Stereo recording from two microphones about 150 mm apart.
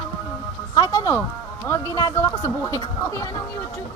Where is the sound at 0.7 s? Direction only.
25° left (ahead or behind).